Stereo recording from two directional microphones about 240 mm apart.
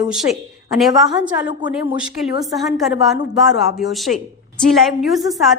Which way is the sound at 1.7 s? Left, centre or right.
Centre.